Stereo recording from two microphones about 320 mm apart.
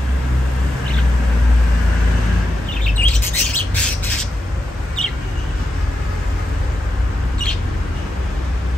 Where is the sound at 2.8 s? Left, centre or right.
Centre.